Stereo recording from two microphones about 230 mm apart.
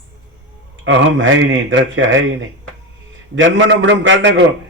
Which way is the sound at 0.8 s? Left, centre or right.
Right.